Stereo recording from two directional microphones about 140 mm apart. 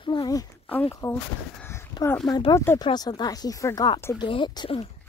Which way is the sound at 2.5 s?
20° left (ahead or behind).